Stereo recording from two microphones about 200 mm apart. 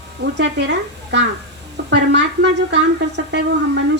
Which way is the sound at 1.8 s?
60° right (ahead or behind).